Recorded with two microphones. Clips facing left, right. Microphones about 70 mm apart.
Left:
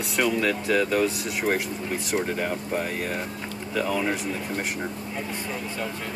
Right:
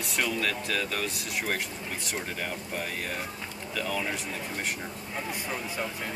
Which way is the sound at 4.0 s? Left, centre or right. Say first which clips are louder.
Left 6 dB; left.